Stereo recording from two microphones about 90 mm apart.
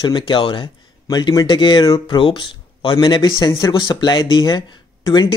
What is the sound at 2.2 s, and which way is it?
Speech, 65° left (ahead or behind).